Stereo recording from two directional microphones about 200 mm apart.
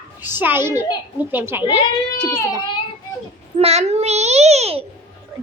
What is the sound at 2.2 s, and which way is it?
Speech, 15° left (ahead or behind).